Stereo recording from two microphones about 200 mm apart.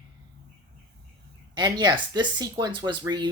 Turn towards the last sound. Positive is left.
turn(degrees=-20)  # may be behind; listen again after turning